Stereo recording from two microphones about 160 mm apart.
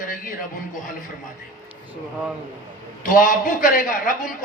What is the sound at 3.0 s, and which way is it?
A man's voice, 55° left (ahead or behind).